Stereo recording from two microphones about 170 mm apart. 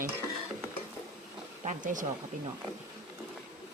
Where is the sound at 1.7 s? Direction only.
50° right (ahead or behind).